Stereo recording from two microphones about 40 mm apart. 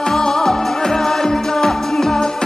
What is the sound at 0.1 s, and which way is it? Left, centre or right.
Music, centre.